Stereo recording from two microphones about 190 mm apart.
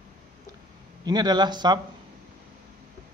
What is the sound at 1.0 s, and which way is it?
Speech, 20° right (ahead or behind).